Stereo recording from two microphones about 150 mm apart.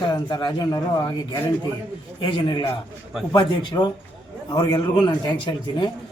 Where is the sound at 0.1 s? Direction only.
30° left (ahead or behind).